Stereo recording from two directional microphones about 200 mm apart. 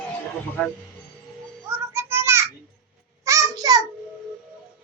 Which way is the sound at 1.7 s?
10° right (ahead or behind).